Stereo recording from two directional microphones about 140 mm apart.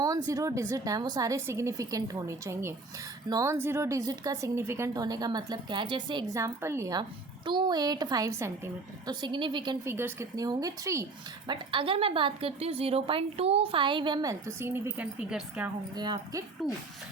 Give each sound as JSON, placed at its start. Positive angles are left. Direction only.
{"t": 0.0, "sound": "a woman's voice", "side_deg": -25}
{"t": 7.4, "sound": "a woman's voice", "side_deg": -35}
{"t": 9.2, "sound": "a woman's voice", "side_deg": -35}
{"t": 9.8, "sound": "a woman's voice", "side_deg": -20}
{"t": 11.4, "sound": "a woman's voice", "side_deg": -35}
{"t": 16.0, "sound": "a woman's voice", "side_deg": -30}
{"t": 16.6, "sound": "speech", "side_deg": 0}